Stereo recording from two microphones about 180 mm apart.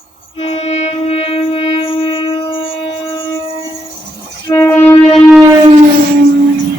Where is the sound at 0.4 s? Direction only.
35° left (ahead or behind).